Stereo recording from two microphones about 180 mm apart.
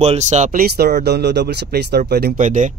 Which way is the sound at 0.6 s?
60° right (ahead or behind).